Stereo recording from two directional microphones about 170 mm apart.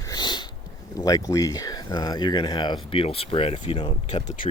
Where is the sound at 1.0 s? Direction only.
20° left (ahead or behind).